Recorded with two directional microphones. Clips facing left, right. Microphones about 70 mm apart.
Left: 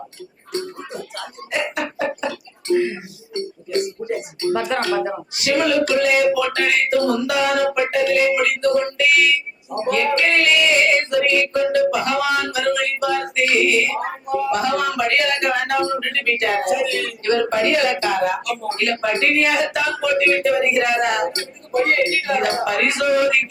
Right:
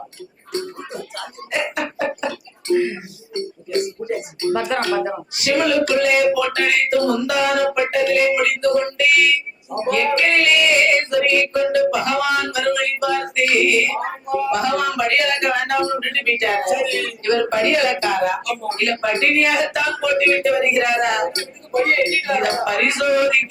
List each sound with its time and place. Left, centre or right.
0.5 s music: right
4.0 s speech: right